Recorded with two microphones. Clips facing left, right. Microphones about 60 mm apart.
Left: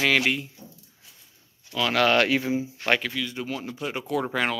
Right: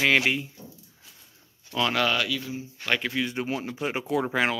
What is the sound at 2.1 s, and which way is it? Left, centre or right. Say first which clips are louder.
Speech: left 7 dB; left.